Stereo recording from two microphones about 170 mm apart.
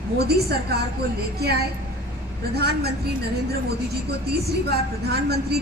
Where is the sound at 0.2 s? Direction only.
70° right (ahead or behind).